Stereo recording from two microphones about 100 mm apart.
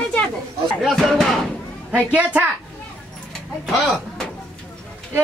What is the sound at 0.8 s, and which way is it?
Speech, centre (ahead or behind).